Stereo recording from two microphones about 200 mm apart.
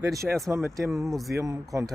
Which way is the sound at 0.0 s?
15° right (ahead or behind).